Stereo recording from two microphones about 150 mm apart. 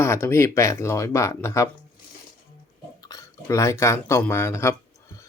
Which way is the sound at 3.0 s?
20° left (ahead or behind).